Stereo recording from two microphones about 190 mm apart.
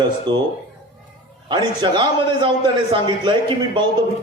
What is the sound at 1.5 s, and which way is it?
A man's voice, 25° right (ahead or behind).